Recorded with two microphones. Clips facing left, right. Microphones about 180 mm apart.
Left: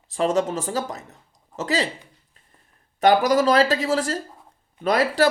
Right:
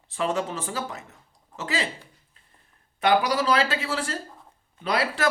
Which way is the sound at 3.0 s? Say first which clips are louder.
Left 5 dB; 45° left (ahead or behind).